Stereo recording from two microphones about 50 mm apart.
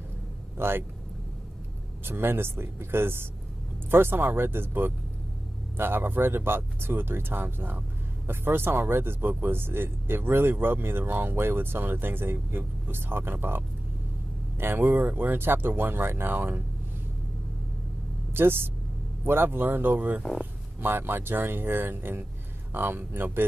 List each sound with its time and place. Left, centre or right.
0.6 s speech: right
2.0 s speech: right
14.6 s speech: right
18.3 s speech: right